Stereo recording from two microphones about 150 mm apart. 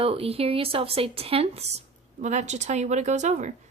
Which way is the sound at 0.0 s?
40° right (ahead or behind).